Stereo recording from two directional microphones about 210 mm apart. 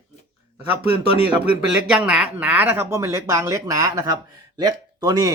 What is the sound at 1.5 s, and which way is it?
Speech, 5° right (ahead or behind).